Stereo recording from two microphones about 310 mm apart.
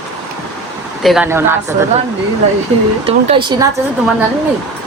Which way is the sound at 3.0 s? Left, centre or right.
Centre.